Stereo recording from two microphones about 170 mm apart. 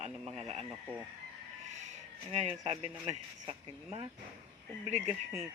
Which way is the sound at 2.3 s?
40° right (ahead or behind).